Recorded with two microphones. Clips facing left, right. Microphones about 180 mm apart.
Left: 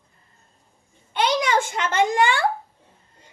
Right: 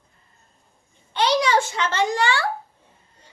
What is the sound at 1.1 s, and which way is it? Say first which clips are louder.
A child's voice: right 1 dB; 50° left (ahead or behind).